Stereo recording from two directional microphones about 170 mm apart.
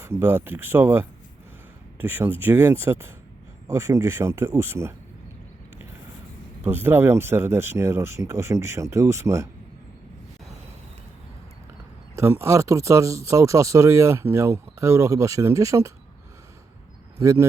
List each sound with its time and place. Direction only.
0.0 s speech: 15° right (ahead or behind)
6.7 s speech: 15° right (ahead or behind)
12.1 s speech: 15° right (ahead or behind)
17.2 s speech: 15° right (ahead or behind)